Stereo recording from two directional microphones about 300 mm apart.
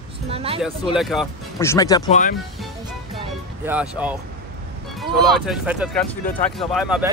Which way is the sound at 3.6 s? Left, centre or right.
Centre.